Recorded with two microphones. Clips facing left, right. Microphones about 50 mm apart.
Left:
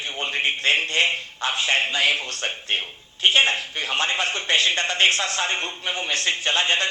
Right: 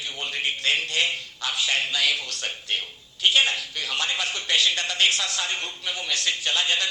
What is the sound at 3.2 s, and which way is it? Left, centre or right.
Speech, left.